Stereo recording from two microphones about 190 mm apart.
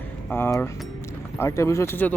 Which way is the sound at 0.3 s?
10° left (ahead or behind).